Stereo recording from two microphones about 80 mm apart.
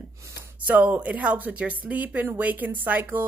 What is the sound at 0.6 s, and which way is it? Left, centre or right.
A woman's voice, right.